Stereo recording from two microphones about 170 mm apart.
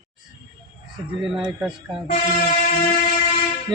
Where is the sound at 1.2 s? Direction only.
Centre (ahead or behind).